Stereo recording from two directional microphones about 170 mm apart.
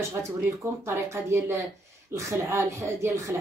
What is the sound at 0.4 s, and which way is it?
Speech, 15° right (ahead or behind).